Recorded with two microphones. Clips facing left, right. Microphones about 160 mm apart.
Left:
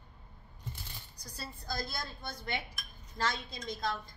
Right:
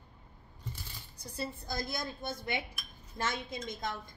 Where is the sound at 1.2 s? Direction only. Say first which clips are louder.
Right 8 dB; 20° right (ahead or behind).